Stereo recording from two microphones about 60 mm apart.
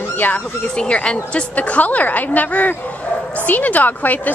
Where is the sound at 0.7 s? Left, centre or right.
Centre.